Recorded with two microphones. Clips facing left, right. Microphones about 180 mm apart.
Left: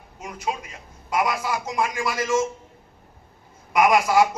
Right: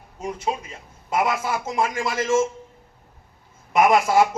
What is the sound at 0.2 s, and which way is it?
A man's voice, 30° right (ahead or behind).